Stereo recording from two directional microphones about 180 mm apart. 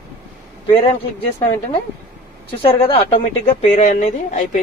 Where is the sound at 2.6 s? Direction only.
30° left (ahead or behind).